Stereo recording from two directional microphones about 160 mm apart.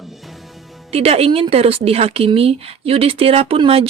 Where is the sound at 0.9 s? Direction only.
40° right (ahead or behind).